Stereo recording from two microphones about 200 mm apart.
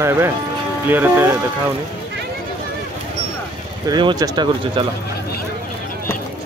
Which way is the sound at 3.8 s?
20° right (ahead or behind).